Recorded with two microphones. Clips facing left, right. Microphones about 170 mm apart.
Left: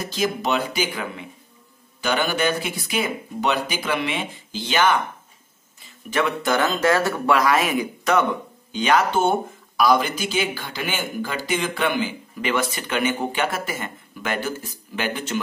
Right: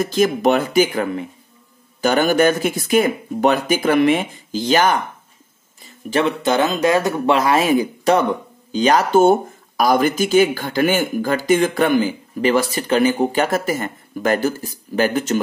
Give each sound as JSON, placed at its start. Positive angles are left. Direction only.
{"t": 0.0, "sound": "speech", "side_deg": -50}
{"t": 6.0, "sound": "speech", "side_deg": -30}